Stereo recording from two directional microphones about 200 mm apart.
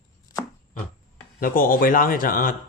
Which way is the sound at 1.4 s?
45° left (ahead or behind).